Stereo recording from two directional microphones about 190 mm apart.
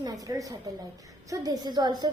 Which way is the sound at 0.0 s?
20° right (ahead or behind).